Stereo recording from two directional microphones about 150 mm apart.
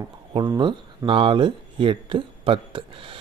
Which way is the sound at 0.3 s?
35° right (ahead or behind).